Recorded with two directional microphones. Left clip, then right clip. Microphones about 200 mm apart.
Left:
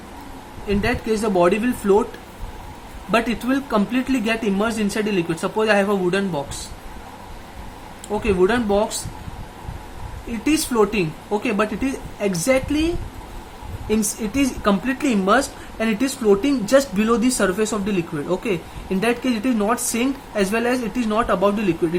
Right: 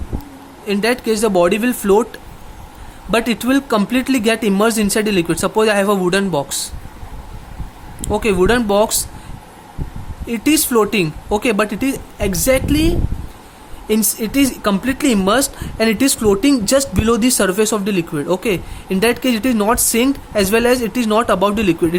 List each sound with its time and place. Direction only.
0.7 s speech: 50° right (ahead or behind)
3.1 s speech: 50° right (ahead or behind)
8.0 s speech: 50° right (ahead or behind)
10.4 s speech: 50° right (ahead or behind)